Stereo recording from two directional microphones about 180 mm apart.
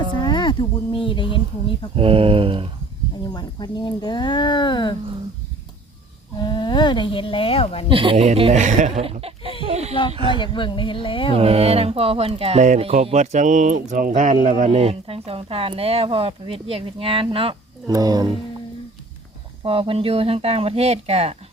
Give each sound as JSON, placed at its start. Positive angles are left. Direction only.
{"t": 0.2, "sound": "a sound", "side_deg": 25}
{"t": 2.0, "sound": "speech", "side_deg": -30}
{"t": 3.3, "sound": "speech", "side_deg": 25}
{"t": 6.4, "sound": "speech", "side_deg": 25}
{"t": 7.9, "sound": "speech", "side_deg": -30}
{"t": 9.6, "sound": "a sound", "side_deg": -35}
{"t": 10.1, "sound": "speech", "side_deg": -30}
{"t": 10.3, "sound": "speech", "side_deg": 25}
{"t": 11.3, "sound": "speech", "side_deg": -35}
{"t": 19.6, "sound": "speech", "side_deg": -30}